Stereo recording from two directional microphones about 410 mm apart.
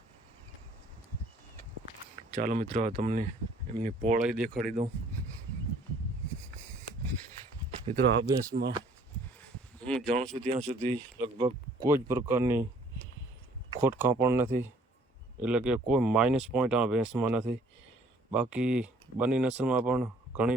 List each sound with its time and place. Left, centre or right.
2.3 s speech: centre
7.9 s speech: centre
9.4 s a sound: centre
10.5 s speech: centre
13.8 s speech: centre